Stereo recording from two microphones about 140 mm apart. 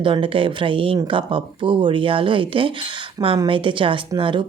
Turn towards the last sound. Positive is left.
turn(degrees=-35)  # may be behind; listen again after turning